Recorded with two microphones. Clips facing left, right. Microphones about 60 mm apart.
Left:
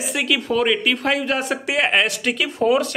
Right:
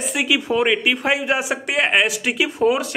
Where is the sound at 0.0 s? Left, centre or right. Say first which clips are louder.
Right 1 dB; centre.